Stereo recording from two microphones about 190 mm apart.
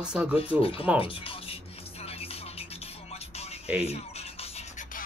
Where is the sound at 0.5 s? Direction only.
30° left (ahead or behind).